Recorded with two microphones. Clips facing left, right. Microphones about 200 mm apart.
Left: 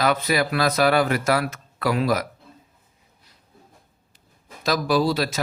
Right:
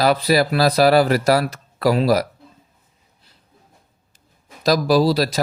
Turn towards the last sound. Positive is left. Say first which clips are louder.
# right 5 dB
turn(degrees=-35)  # may be behind; listen again after turning